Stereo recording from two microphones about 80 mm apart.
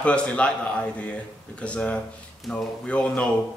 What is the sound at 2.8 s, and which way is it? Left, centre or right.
Speech, centre.